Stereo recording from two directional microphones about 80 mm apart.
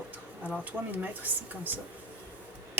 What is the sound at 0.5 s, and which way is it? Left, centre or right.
Speech, right.